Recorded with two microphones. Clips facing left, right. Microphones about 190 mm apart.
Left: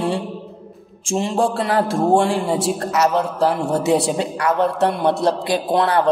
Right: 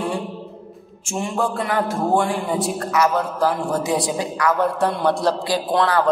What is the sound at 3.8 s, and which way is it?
Speech, 70° left (ahead or behind).